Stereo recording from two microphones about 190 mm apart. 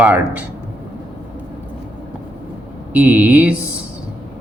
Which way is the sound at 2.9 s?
10° right (ahead or behind).